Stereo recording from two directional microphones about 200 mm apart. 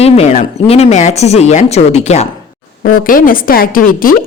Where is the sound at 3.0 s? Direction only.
45° left (ahead or behind).